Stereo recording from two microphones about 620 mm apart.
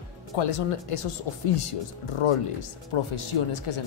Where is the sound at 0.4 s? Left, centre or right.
Left.